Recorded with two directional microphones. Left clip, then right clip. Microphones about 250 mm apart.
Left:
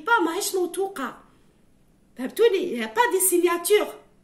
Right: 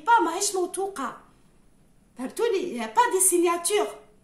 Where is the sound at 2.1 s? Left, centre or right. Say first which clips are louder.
Left 5 dB; centre.